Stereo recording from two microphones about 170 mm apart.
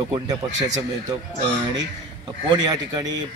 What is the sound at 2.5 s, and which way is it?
Speech, 25° right (ahead or behind).